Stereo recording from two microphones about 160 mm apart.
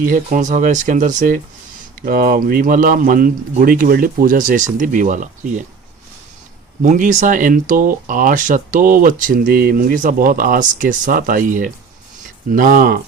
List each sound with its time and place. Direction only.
0.0 s speech: 55° right (ahead or behind)
6.8 s speech: 50° right (ahead or behind)